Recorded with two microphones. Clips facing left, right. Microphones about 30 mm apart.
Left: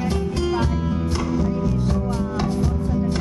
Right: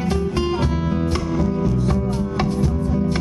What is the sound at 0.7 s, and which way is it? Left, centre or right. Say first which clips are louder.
Music: right 2 dB; right.